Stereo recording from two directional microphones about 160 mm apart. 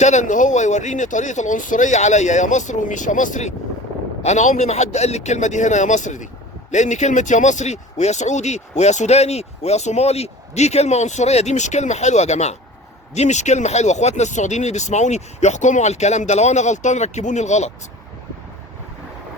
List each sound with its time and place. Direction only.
0.0 s speech: 45° left (ahead or behind)